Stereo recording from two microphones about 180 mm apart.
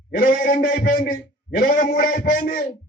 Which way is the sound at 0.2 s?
50° left (ahead or behind).